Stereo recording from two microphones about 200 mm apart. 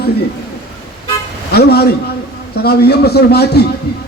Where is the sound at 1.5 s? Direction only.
50° left (ahead or behind).